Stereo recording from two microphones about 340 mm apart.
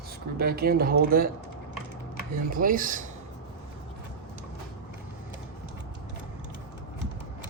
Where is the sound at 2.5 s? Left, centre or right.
Right.